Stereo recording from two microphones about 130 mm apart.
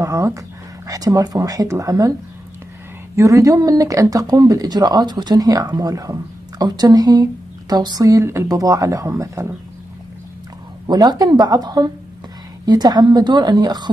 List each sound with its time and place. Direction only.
0.0 s speech: 25° right (ahead or behind)
3.2 s a woman's voice: 25° right (ahead or behind)
10.9 s a woman's voice: 30° right (ahead or behind)